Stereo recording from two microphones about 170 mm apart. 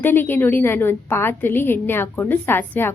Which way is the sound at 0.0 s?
10° left (ahead or behind).